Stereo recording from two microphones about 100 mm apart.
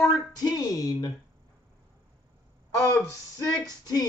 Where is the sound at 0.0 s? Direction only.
40° left (ahead or behind).